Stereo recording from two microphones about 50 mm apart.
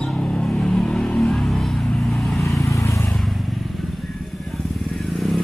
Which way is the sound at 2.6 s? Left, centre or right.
Left.